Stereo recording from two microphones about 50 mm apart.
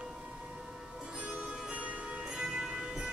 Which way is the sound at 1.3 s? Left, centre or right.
Right.